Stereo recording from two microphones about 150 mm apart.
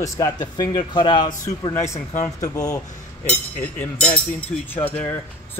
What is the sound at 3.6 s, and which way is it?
Speech, 10° left (ahead or behind).